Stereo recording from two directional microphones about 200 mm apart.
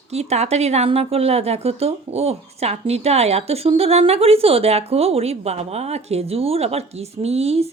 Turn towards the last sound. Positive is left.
turn(degrees=-30)  # may be behind; listen again after turning